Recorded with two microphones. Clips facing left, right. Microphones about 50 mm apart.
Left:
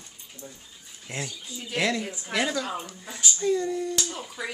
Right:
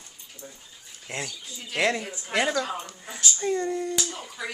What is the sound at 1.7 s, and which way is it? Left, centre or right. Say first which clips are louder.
Speech: right 1 dB; right.